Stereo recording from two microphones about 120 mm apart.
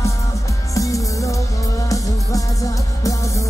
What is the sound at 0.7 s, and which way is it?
Music, 30° left (ahead or behind).